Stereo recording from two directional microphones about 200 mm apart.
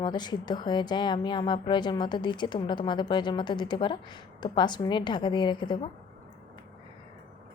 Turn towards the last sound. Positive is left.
turn(degrees=25)  # may be behind; listen again after turning